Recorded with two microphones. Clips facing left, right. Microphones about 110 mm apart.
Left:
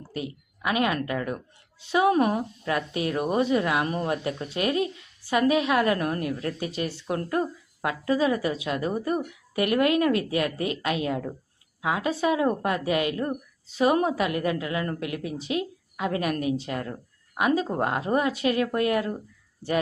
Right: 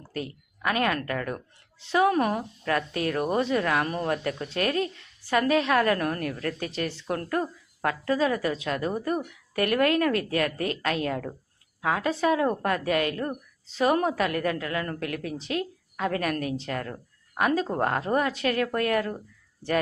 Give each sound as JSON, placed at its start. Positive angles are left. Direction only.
{"t": 0.1, "sound": "a woman's voice", "side_deg": 20}